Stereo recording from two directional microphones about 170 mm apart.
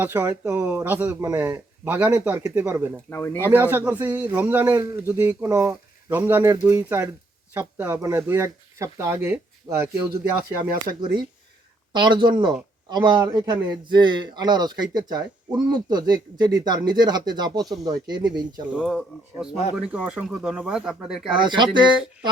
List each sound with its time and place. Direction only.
0.0 s a man's voice: 15° right (ahead or behind)
3.1 s speech: 15° left (ahead or behind)
3.4 s a man's voice: 10° right (ahead or behind)
10.8 s speech: 25° right (ahead or behind)
18.6 s speech: 5° right (ahead or behind)
21.3 s speech: 25° right (ahead or behind)